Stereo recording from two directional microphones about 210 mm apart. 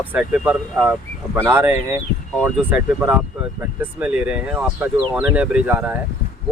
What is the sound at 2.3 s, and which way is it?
Speech, centre (ahead or behind).